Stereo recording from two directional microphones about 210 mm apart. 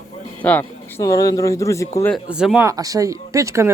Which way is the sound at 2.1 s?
5° right (ahead or behind).